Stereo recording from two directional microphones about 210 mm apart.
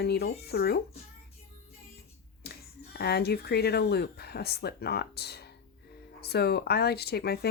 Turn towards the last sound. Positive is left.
turn(degrees=50)  # may be behind; listen again after turning